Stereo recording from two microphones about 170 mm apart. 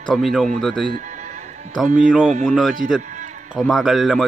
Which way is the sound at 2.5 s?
Centre (ahead or behind).